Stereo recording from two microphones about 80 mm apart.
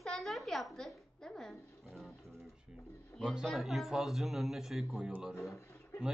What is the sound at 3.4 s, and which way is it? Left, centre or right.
Speech, centre.